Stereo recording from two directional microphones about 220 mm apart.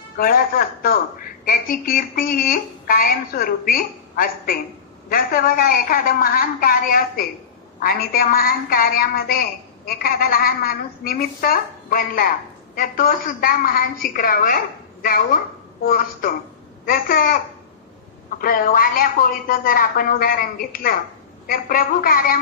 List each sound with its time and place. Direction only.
0.2 s a woman's voice: 40° left (ahead or behind)
18.4 s a woman's voice: 40° left (ahead or behind)